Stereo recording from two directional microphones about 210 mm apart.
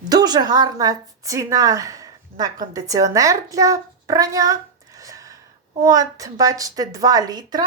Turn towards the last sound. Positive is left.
turn(degrees=-20)  # may be behind; listen again after turning